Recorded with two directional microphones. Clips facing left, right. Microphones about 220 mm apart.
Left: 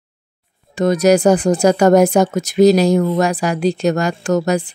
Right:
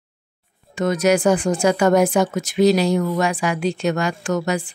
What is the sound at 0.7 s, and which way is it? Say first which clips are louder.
A woman's voice: left 5 dB; 35° left (ahead or behind).